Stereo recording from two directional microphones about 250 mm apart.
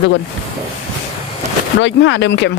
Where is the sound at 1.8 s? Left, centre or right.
Left.